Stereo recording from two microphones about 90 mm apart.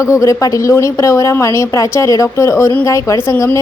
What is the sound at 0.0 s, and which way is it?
A woman's voice, 35° left (ahead or behind).